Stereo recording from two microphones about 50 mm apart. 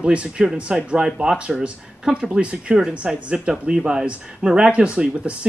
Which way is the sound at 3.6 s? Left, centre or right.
Right.